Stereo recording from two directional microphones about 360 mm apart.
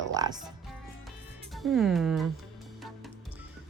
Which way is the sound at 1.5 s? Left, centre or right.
Centre.